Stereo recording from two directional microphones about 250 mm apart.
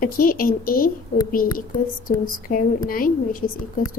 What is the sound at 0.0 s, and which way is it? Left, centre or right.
A woman's voice, left.